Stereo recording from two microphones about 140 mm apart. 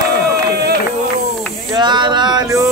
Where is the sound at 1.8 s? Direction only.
35° right (ahead or behind).